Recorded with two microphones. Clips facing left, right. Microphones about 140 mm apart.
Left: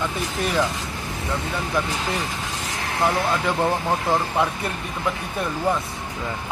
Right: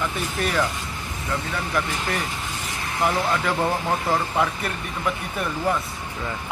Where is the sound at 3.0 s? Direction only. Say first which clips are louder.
Left 1 dB; 20° left (ahead or behind).